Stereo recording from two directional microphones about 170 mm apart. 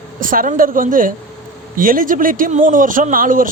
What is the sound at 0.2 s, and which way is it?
Speech, 55° right (ahead or behind).